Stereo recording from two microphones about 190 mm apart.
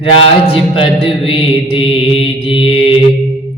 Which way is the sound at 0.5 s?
30° left (ahead or behind).